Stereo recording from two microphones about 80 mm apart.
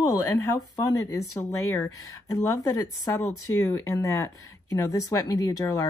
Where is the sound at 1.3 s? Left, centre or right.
Left.